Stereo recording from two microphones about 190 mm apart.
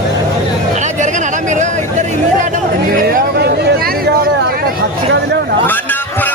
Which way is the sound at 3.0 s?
50° right (ahead or behind).